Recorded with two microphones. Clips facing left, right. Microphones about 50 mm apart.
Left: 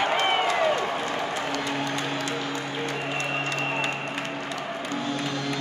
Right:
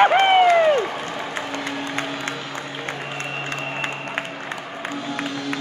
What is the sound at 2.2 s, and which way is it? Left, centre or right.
Music, right.